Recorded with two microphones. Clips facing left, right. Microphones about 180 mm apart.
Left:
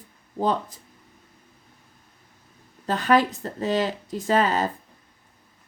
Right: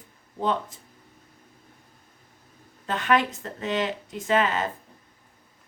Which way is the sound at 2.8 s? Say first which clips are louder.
Left 3 dB; 35° left (ahead or behind).